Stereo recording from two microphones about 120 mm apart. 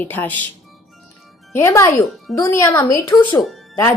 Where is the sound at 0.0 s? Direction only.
15° left (ahead or behind).